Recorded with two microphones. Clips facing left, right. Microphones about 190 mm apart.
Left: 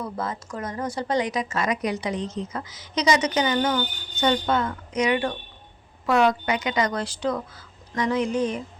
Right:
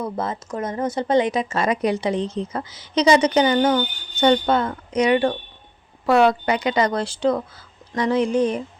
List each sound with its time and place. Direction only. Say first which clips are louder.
0.0 s a woman's voice: right 4 dB; 25° right (ahead or behind)